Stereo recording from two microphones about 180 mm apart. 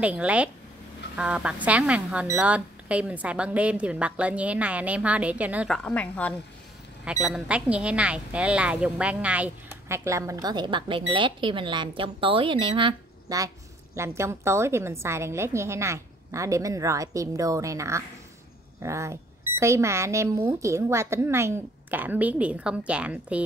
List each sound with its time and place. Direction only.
0.0 s speech: 5° right (ahead or behind)
5.9 s a woman's voice: 5° left (ahead or behind)
7.1 s speech: 5° right (ahead or behind)